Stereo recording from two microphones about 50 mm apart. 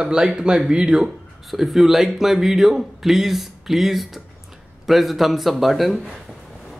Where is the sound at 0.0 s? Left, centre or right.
Centre.